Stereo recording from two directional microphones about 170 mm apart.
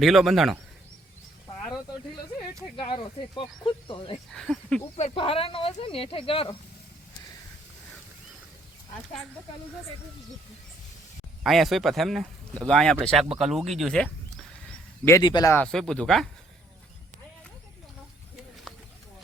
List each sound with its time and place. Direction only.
0.0 s speech: centre (ahead or behind)
2.7 s speech: 30° left (ahead or behind)
4.3 s speech: 5° left (ahead or behind)
4.9 s speech: 35° left (ahead or behind)
11.4 s speech: centre (ahead or behind)
15.0 s speech: 20° left (ahead or behind)
15.5 s speech: 5° left (ahead or behind)